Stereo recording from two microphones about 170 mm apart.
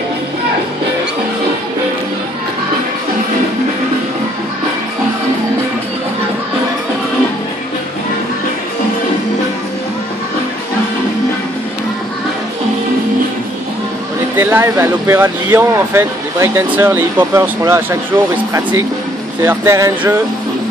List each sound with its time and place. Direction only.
14.4 s speech: 15° right (ahead or behind)